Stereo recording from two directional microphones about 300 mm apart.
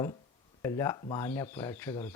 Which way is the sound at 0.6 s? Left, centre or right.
Centre.